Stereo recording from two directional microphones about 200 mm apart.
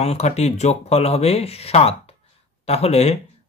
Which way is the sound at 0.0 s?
30° left (ahead or behind).